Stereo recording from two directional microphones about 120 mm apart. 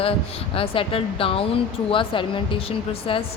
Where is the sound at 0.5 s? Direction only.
50° left (ahead or behind).